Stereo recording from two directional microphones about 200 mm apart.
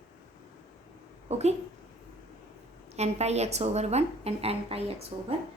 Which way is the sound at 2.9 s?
30° right (ahead or behind).